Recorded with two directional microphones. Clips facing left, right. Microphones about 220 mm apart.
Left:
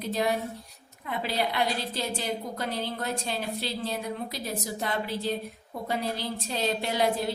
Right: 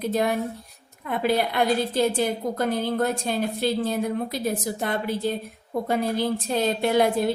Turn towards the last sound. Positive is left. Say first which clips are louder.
# right 6 dB
turn(degrees=-50)  # may be behind; listen again after turning